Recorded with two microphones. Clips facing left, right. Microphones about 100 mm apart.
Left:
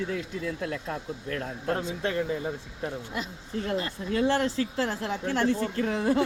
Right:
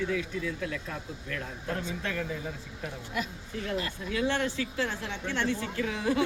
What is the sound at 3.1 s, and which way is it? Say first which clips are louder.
A woman's voice: left 1 dB; 25° left (ahead or behind).